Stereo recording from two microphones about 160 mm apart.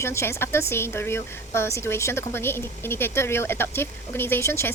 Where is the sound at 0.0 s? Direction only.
15° left (ahead or behind).